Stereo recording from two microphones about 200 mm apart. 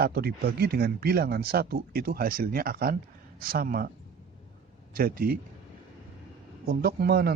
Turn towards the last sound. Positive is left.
turn(degrees=-50)  # may be behind; listen again after turning